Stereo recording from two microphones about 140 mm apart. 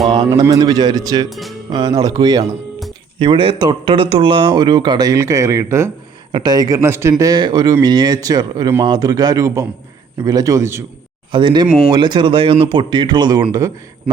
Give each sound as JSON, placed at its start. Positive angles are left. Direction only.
{"t": 0.1, "sound": "speech", "side_deg": -30}
{"t": 1.3, "sound": "music", "side_deg": 0}
{"t": 1.7, "sound": "speech", "side_deg": -25}
{"t": 3.2, "sound": "speech", "side_deg": -40}
{"t": 11.3, "sound": "speech", "side_deg": -35}